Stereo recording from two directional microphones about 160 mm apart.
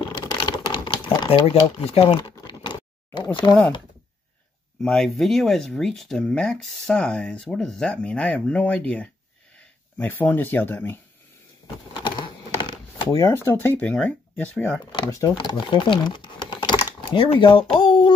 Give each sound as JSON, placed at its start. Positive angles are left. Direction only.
{"t": 0.3, "sound": "typewriter", "side_deg": 25}
{"t": 2.1, "sound": "computer keyboard", "side_deg": 30}
{"t": 4.8, "sound": "speech", "side_deg": 5}
{"t": 11.6, "sound": "a sound", "side_deg": 30}
{"t": 14.9, "sound": "speech", "side_deg": 25}